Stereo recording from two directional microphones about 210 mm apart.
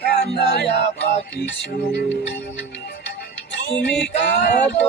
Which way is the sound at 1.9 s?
55° left (ahead or behind).